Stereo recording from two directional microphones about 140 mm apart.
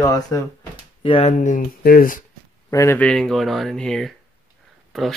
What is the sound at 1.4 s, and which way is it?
Speech, 75° left (ahead or behind).